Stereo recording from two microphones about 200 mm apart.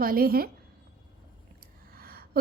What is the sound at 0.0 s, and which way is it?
Speech, 45° right (ahead or behind).